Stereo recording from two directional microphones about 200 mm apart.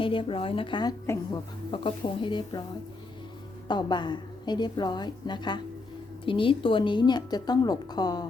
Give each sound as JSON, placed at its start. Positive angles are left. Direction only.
{"t": 0.0, "sound": "a woman's voice", "side_deg": 25}
{"t": 3.7, "sound": "a woman's voice", "side_deg": 20}